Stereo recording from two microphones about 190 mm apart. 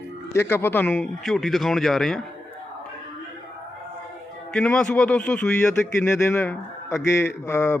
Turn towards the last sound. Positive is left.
turn(degrees=15)  # may be behind; listen again after turning